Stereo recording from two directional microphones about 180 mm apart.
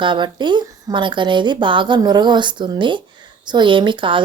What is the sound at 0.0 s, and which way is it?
Speech, 25° right (ahead or behind).